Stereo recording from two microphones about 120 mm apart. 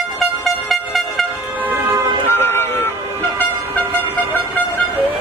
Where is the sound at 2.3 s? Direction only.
20° left (ahead or behind).